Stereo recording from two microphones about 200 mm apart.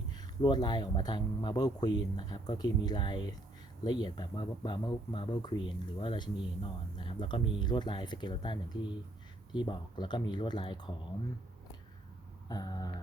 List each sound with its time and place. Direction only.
0.1 s speech: 20° left (ahead or behind)
12.5 s speech: 20° left (ahead or behind)